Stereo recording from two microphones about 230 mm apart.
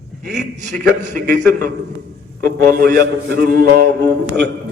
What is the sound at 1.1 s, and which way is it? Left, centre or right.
Mantra, right.